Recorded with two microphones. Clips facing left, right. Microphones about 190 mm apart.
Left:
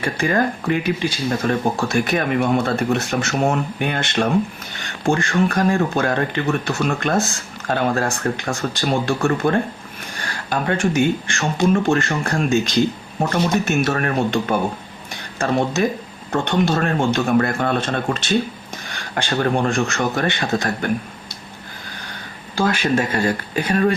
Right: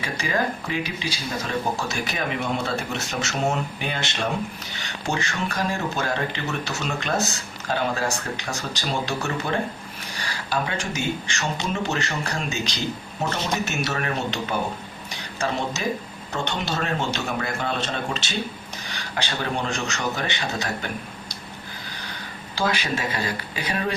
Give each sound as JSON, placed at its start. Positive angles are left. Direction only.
{"t": 0.0, "sound": "speech", "side_deg": 55}
{"t": 22.5, "sound": "speech", "side_deg": 50}